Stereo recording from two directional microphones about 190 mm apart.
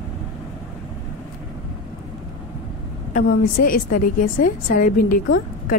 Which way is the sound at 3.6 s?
50° left (ahead or behind).